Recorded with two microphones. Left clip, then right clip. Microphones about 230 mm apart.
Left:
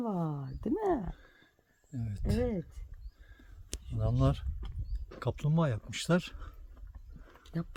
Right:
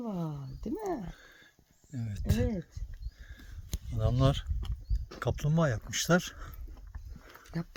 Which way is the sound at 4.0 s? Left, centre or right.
Centre.